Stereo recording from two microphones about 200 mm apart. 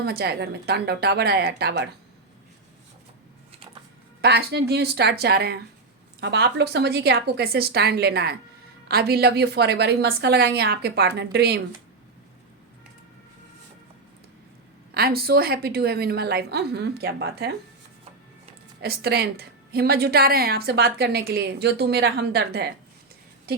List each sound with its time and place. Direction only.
0.0 s a woman's voice: 50° right (ahead or behind)
4.2 s a woman's voice: 55° right (ahead or behind)
14.9 s a woman's voice: 50° right (ahead or behind)
18.8 s a woman's voice: 50° right (ahead or behind)